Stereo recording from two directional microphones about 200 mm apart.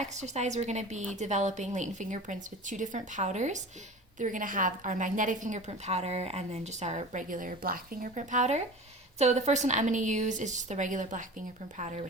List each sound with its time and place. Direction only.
0.0 s a woman's voice: 35° right (ahead or behind)